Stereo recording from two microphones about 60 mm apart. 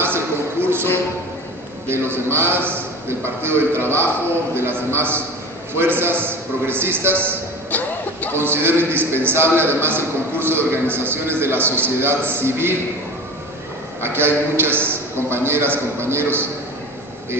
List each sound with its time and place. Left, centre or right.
0.0 s a sound: right
1.9 s a man's voice: right
7.7 s music: left
8.4 s a man's voice: right
14.0 s a man's voice: right